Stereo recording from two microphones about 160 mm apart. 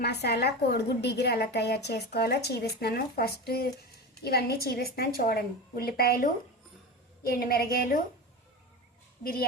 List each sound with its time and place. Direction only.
0.0 s a woman's voice: 90° left; by 7.9 s 70° left (ahead or behind)